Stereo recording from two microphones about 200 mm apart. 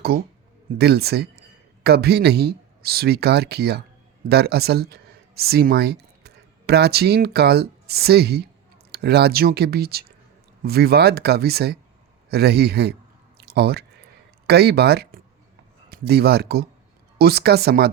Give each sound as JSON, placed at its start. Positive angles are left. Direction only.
{"t": 0.8, "sound": "speech", "side_deg": -55}
{"t": 13.4, "sound": "a sound", "side_deg": -50}
{"t": 14.4, "sound": "speech", "side_deg": -55}